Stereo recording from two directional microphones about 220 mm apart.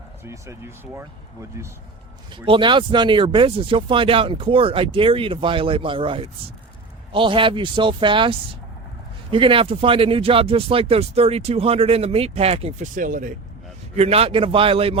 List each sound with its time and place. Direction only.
0.3 s speech: 10° right (ahead or behind)